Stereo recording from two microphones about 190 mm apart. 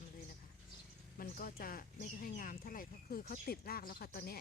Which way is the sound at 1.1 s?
50° left (ahead or behind).